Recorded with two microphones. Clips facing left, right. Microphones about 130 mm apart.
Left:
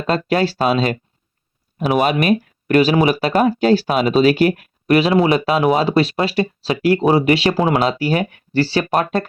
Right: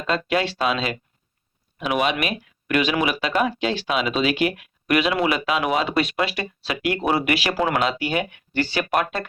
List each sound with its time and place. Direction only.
0.1 s speech: 40° left (ahead or behind)